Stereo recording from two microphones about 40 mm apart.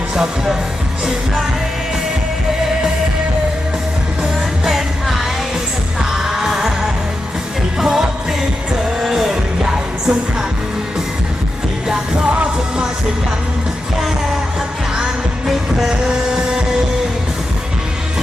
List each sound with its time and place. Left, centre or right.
4.6 s music: centre
6.2 s music: centre
7.8 s music: centre
12.3 s music: right
15.4 s music: centre
16.0 s a sound: centre